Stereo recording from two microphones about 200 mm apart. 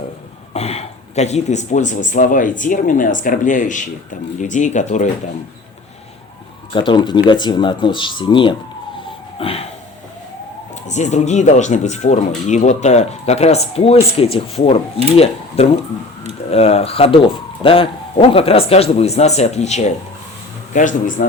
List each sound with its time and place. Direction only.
0.5 s speech: 30° left (ahead or behind)
6.7 s a man's voice: 25° left (ahead or behind)
9.4 s a sound: 30° left (ahead or behind)
10.8 s a man's voice: 35° left (ahead or behind)